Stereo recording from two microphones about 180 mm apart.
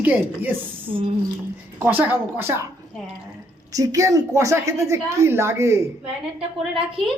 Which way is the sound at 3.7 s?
20° right (ahead or behind).